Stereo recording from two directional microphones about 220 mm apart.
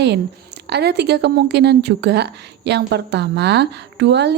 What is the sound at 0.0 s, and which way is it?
A woman's voice, 50° right (ahead or behind).